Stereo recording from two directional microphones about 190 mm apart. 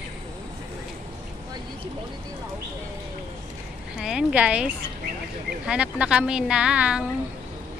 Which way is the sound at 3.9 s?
5° right (ahead or behind).